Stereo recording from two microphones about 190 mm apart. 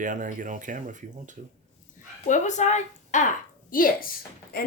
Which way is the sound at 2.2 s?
40° left (ahead or behind).